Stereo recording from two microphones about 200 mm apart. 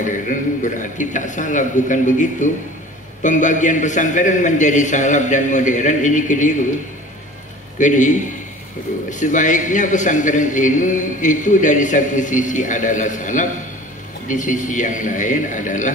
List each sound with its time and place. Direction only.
0.0 s a man's voice: 40° left (ahead or behind)
7.8 s a man's voice: 40° left (ahead or behind)